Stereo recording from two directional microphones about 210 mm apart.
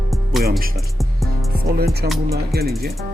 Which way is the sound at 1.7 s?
50° right (ahead or behind).